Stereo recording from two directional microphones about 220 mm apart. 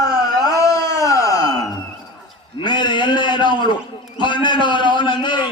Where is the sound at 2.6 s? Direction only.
20° left (ahead or behind).